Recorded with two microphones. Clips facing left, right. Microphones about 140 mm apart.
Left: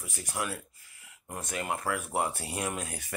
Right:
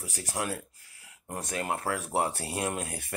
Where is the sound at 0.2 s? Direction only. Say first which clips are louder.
Right 2 dB; 35° right (ahead or behind).